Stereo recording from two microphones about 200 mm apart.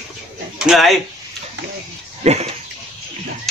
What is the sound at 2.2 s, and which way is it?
Speech, 35° right (ahead or behind).